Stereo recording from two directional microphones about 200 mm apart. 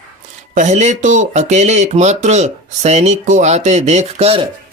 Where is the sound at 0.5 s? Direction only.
35° right (ahead or behind).